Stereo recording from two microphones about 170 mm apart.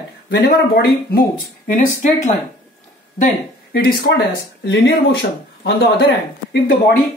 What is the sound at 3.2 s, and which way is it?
Speech, 60° left (ahead or behind).